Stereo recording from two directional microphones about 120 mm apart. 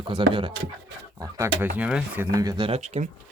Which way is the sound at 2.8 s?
70° right (ahead or behind).